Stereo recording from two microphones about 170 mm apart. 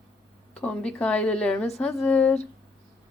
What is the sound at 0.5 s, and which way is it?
Speech, 5° left (ahead or behind).